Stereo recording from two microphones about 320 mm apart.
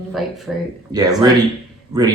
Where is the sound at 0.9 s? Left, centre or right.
Centre.